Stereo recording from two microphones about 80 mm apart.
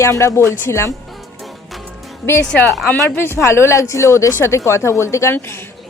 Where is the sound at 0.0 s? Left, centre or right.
Left.